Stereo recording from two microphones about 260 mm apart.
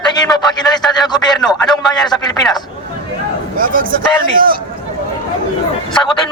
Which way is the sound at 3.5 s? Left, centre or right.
Right.